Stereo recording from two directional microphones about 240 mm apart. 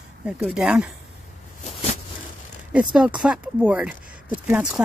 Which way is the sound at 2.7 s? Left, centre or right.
Centre.